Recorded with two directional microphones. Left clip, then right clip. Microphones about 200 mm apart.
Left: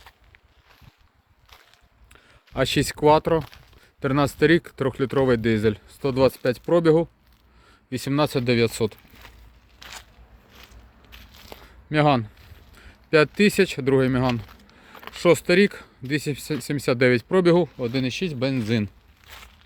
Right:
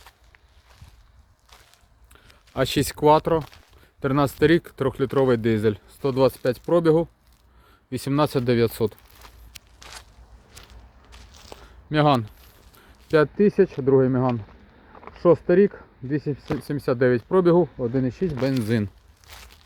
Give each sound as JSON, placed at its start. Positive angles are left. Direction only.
{"t": 2.1, "sound": "speech", "side_deg": 0}
{"t": 11.3, "sound": "a sound", "side_deg": 10}
{"t": 11.9, "sound": "speech", "side_deg": 0}
{"t": 12.7, "sound": "a sound", "side_deg": 0}
{"t": 13.2, "sound": "speech", "side_deg": 20}
{"t": 17.6, "sound": "speech", "side_deg": 20}
{"t": 18.3, "sound": "speech", "side_deg": -10}